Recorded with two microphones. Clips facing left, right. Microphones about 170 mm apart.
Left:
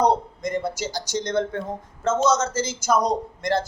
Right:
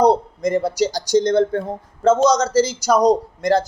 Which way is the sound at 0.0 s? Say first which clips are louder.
Right 5 dB; 35° right (ahead or behind).